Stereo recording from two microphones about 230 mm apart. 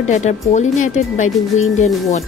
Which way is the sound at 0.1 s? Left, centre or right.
Left.